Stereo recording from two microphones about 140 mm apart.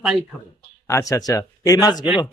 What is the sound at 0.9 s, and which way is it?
Speech, 25° left (ahead or behind).